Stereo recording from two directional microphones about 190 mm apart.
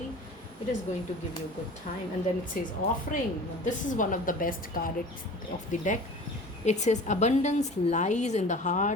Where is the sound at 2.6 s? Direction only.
50° left (ahead or behind).